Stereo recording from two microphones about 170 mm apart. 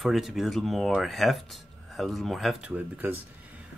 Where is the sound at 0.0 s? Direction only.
Centre (ahead or behind).